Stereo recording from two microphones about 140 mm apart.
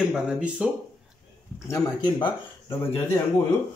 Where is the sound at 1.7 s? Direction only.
35° left (ahead or behind).